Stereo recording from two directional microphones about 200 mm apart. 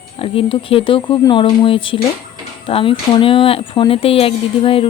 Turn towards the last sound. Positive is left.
turn(degrees=25)  # may be behind; listen again after turning